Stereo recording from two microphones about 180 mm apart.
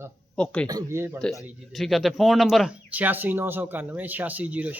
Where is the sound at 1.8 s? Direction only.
Centre (ahead or behind).